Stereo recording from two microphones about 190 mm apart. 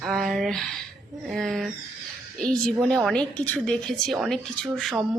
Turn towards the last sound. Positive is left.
turn(degrees=5)  # may be behind; listen again after turning